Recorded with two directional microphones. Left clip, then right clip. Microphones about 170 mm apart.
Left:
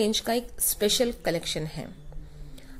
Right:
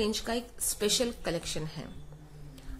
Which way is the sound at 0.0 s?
25° left (ahead or behind).